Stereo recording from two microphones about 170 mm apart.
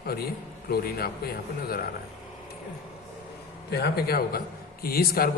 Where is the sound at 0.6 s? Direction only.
65° left (ahead or behind).